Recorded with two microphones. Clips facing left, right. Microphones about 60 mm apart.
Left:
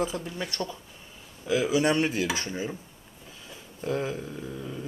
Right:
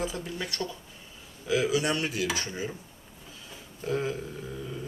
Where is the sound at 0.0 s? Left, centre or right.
Left.